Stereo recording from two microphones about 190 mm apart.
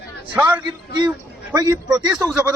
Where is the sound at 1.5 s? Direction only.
20° right (ahead or behind).